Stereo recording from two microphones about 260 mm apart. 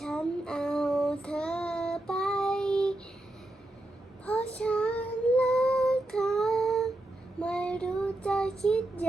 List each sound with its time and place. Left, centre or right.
0.0 s child singing: centre
4.3 s child singing: centre